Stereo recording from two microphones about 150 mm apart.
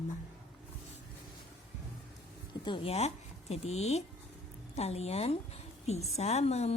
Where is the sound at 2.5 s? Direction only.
30° left (ahead or behind).